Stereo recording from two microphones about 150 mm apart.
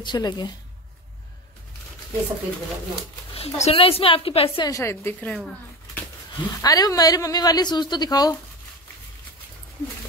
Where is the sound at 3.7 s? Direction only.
40° left (ahead or behind).